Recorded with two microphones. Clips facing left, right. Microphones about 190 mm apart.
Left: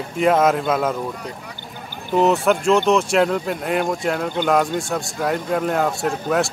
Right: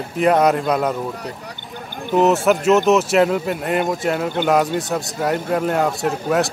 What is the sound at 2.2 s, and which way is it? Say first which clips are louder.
Speech: right 1 dB; 5° right (ahead or behind).